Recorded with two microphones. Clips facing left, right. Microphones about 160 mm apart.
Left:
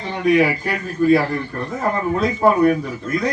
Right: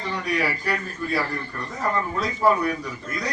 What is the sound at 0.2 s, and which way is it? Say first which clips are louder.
Speech: left 13 dB; 55° left (ahead or behind).